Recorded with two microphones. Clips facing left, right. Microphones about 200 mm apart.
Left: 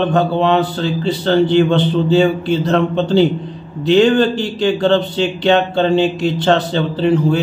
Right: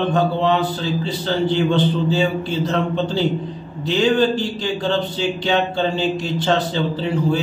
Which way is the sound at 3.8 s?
65° left (ahead or behind).